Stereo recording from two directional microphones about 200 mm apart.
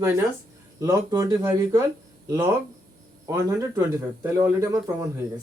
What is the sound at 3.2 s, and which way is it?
Speech, 15° right (ahead or behind).